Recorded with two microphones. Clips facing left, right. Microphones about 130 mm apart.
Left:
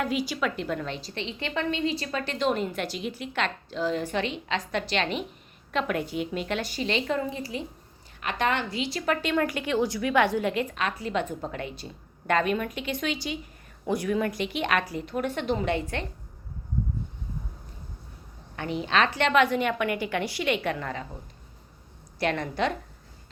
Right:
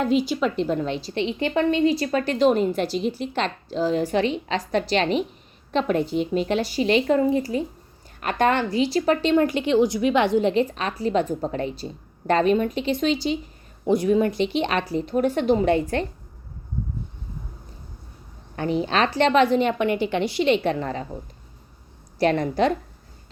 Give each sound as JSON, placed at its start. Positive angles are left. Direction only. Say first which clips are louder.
{"t": 0.0, "sound": "a woman's voice", "louder": "right 6 dB", "side_deg": -25}
{"t": 18.5, "sound": "a woman's voice", "louder": "right 4 dB", "side_deg": -35}
{"t": 22.2, "sound": "a woman's voice", "louder": "right 7 dB", "side_deg": -35}